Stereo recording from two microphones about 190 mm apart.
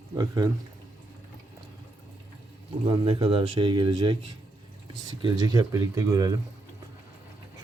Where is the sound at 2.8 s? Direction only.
30° right (ahead or behind).